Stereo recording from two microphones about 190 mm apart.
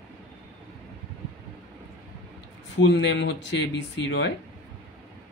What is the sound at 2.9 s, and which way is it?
Speech, 70° left (ahead or behind).